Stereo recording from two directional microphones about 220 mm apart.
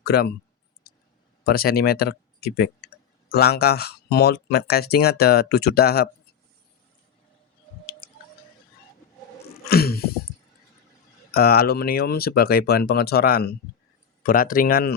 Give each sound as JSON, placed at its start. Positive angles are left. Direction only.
{"t": 0.0, "sound": "speech", "side_deg": 45}
{"t": 1.5, "sound": "speech", "side_deg": 45}
{"t": 9.6, "sound": "a sound", "side_deg": 45}
{"t": 11.3, "sound": "speech", "side_deg": 45}